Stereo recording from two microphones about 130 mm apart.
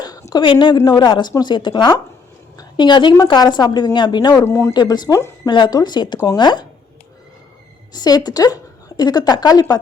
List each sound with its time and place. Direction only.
0.0 s a sound: 25° left (ahead or behind)
0.4 s a woman's voice: 40° left (ahead or behind)
4.4 s speech: 20° left (ahead or behind)
4.7 s a woman's voice: 35° left (ahead or behind)
7.9 s a woman's voice: 30° left (ahead or behind)